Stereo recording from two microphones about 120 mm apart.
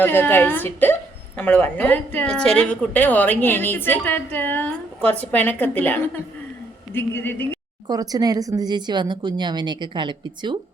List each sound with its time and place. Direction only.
0.0 s a woman's voice: 15° left (ahead or behind)
7.9 s speech: 30° right (ahead or behind)